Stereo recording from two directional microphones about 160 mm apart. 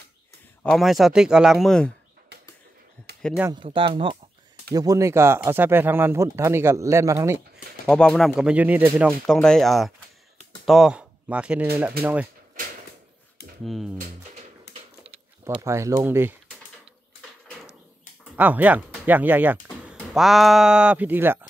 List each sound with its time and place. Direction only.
0.7 s speech: centre (ahead or behind)
3.5 s speech: 30° right (ahead or behind)
4.7 s speech: 20° right (ahead or behind)
7.8 s speech: 5° left (ahead or behind); by 9.1 s 10° right (ahead or behind)
9.2 s speech: 5° left (ahead or behind)
13.7 s speech: centre (ahead or behind)
15.4 s speech: 15° right (ahead or behind)
18.3 s speech: 10° right (ahead or behind)